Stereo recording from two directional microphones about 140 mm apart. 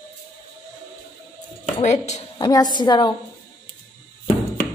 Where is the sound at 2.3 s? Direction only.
30° left (ahead or behind).